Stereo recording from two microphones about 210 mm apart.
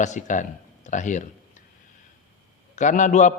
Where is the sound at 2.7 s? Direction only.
35° left (ahead or behind).